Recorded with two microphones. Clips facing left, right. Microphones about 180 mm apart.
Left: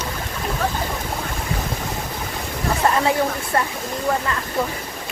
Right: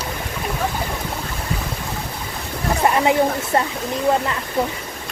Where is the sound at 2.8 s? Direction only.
20° right (ahead or behind).